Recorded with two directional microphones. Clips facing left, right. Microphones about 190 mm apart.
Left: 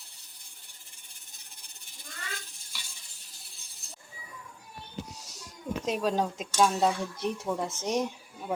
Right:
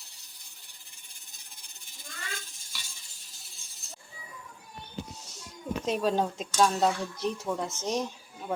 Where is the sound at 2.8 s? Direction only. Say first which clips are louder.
Even; 60° left (ahead or behind).